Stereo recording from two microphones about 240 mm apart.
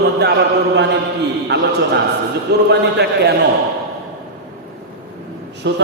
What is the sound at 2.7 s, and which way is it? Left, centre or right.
Speech, right.